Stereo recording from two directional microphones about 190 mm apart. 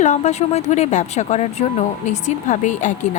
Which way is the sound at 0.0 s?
35° left (ahead or behind).